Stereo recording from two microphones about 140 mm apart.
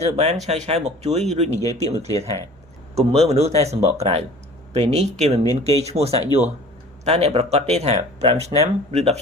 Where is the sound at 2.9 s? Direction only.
50° right (ahead or behind).